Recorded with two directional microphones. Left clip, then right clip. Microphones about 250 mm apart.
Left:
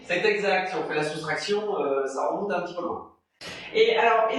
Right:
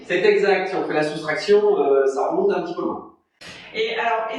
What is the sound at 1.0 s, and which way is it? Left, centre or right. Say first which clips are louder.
Speech: right 5 dB; left.